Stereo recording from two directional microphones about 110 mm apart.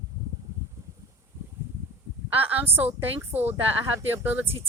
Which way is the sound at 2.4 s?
15° right (ahead or behind).